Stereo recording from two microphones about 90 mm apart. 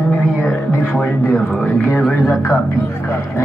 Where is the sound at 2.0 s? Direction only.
5° left (ahead or behind).